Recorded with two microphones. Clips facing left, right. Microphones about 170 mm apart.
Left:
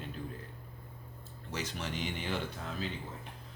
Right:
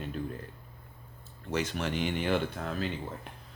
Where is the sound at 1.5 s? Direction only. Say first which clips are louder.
Right 7 dB; 60° right (ahead or behind).